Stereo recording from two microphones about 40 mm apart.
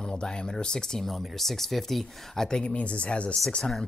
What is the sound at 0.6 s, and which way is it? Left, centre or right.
Speech, left.